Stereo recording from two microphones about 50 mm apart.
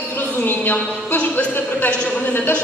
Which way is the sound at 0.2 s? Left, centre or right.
Left.